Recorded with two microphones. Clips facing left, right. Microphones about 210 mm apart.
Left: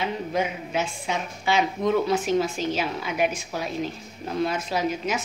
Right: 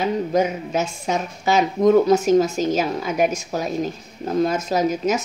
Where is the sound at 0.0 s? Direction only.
40° right (ahead or behind).